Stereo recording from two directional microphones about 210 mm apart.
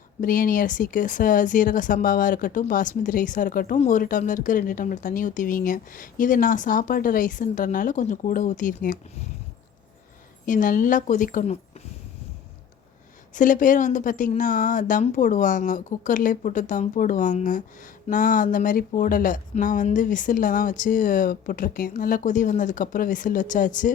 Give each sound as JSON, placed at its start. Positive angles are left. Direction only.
{"t": 0.2, "sound": "speech", "side_deg": 40}
{"t": 10.4, "sound": "speech", "side_deg": 40}
{"t": 13.3, "sound": "speech", "side_deg": 40}